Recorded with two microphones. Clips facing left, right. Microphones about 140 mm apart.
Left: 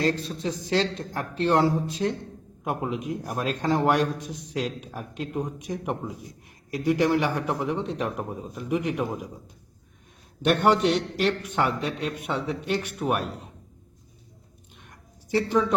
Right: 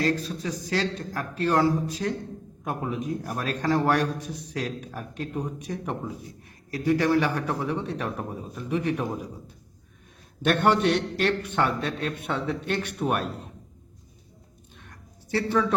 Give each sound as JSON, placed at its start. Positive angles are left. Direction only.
{"t": 0.0, "sound": "a man's voice", "side_deg": 25}
{"t": 10.4, "sound": "a man's voice", "side_deg": 15}
{"t": 15.3, "sound": "a man's voice", "side_deg": 15}